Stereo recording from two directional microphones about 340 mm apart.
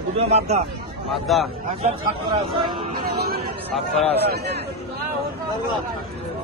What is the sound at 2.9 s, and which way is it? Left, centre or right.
Music, right.